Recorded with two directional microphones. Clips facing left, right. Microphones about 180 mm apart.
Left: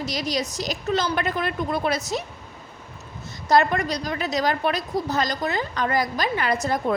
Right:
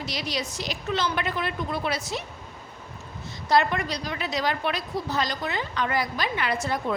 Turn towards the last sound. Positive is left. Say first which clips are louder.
# left 4 dB
turn(degrees=40)  # may be behind; listen again after turning